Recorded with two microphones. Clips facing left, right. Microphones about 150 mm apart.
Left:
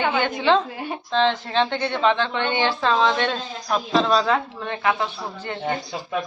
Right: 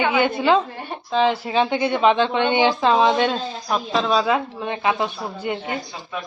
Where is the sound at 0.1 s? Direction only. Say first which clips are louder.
Right 2 dB; 10° right (ahead or behind).